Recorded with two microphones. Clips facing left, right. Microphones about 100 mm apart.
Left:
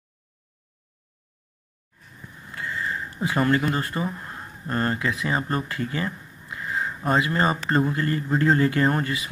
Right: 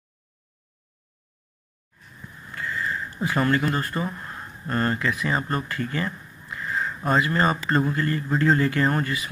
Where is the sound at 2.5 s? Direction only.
25° left (ahead or behind).